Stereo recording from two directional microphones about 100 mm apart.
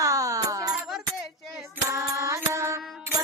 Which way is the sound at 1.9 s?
35° right (ahead or behind).